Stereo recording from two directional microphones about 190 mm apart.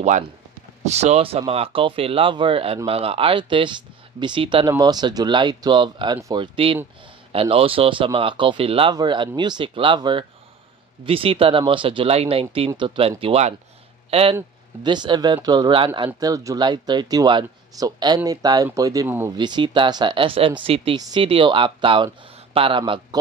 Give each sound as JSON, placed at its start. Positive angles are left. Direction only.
{"t": 0.8, "sound": "speech", "side_deg": -35}
{"t": 14.3, "sound": "speech", "side_deg": -25}
{"t": 19.3, "sound": "speech", "side_deg": -25}